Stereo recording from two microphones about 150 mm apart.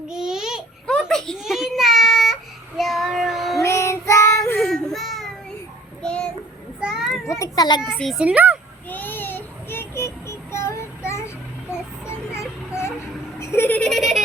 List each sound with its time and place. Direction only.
0.1 s a sound: 5° right (ahead or behind)
3.6 s child singing: 20° left (ahead or behind)
6.7 s children playing: 5° right (ahead or behind)
7.3 s a child's voice: 20° left (ahead or behind)
8.2 s speech: 10° right (ahead or behind)
8.9 s child singing: 15° left (ahead or behind)
11.7 s music: 15° left (ahead or behind)
13.4 s a sound: 15° left (ahead or behind); by 14.3 s centre (ahead or behind)